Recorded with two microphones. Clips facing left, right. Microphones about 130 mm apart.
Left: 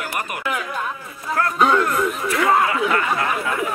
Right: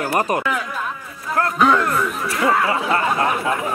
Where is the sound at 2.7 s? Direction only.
30° right (ahead or behind).